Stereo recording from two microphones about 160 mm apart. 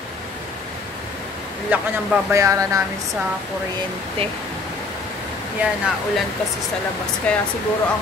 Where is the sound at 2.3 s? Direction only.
20° right (ahead or behind).